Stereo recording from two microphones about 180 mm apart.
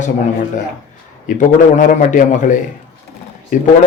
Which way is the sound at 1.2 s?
45° left (ahead or behind).